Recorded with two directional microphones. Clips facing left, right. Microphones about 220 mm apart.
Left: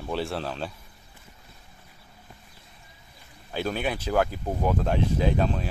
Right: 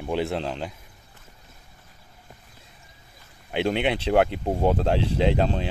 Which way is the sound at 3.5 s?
25° right (ahead or behind).